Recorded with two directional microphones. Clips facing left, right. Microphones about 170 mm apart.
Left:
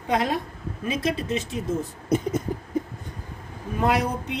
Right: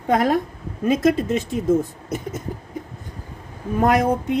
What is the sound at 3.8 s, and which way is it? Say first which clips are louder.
Speech: right 5 dB; 50° right (ahead or behind).